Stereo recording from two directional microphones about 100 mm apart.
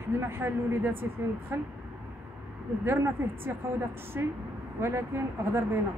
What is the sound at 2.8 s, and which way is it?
Speech, 25° right (ahead or behind).